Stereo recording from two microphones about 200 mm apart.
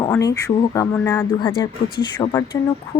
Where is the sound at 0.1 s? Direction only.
15° left (ahead or behind).